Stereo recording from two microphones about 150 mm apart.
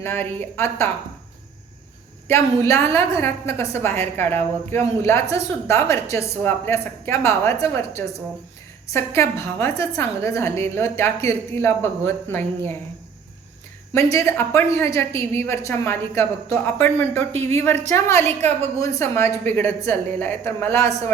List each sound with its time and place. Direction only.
0.0 s a woman's voice: 15° left (ahead or behind)
2.2 s a woman's voice: 15° left (ahead or behind)
13.9 s a woman's voice: 20° left (ahead or behind)